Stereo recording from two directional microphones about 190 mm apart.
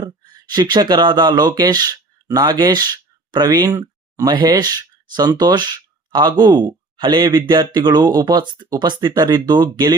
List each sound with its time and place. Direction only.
0.0 s speech: 20° right (ahead or behind)